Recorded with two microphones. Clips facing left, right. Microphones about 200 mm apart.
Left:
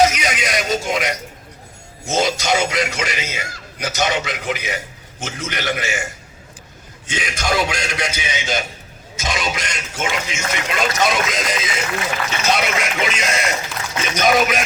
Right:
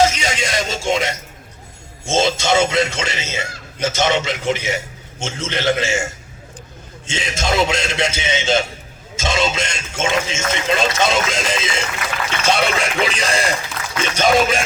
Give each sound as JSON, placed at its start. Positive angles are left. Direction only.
{"t": 0.0, "sound": "music", "side_deg": -25}
{"t": 2.0, "sound": "speech", "side_deg": -25}
{"t": 7.1, "sound": "speech", "side_deg": -25}